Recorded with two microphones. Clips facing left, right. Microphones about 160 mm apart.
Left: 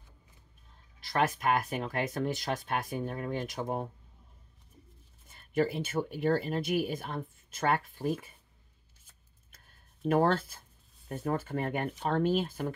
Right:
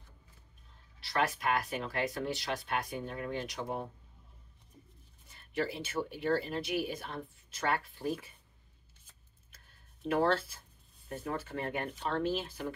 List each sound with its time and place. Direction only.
1.0 s speech: 45° left (ahead or behind)
5.3 s speech: 45° left (ahead or behind)
10.0 s speech: 50° left (ahead or behind)